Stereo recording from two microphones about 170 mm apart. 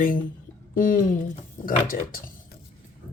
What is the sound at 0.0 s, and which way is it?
Speech, 55° left (ahead or behind).